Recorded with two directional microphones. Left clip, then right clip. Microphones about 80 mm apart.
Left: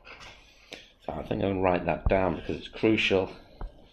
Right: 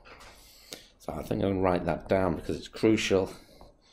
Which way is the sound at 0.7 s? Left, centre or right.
Right.